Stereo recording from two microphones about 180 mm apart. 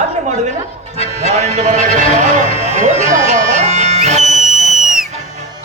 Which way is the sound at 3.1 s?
40° right (ahead or behind).